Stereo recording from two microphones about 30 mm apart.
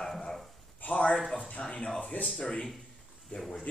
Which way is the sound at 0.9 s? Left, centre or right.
Left.